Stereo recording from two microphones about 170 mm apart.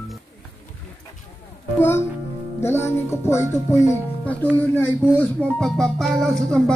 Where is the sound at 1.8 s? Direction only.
15° left (ahead or behind).